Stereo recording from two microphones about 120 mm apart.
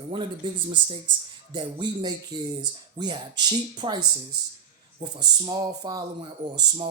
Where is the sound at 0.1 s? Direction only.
45° right (ahead or behind).